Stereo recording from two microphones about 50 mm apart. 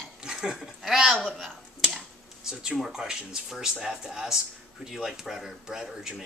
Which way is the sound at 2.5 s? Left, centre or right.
Centre.